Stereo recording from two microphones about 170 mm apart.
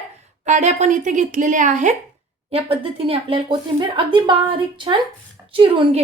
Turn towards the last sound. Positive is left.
turn(degrees=-30)  # may be behind; listen again after turning